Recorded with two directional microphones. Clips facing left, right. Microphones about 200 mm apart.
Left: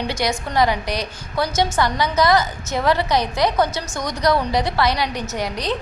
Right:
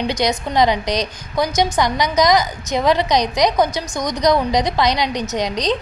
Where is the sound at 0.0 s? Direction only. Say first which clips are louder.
Right 3 dB; 20° right (ahead or behind).